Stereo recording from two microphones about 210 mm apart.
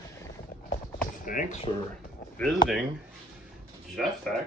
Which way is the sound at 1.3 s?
40° left (ahead or behind).